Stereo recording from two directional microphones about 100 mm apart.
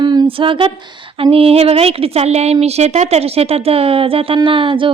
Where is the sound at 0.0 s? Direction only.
45° right (ahead or behind).